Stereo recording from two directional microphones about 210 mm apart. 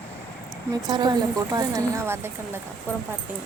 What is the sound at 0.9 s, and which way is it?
A woman's voice, 20° right (ahead or behind).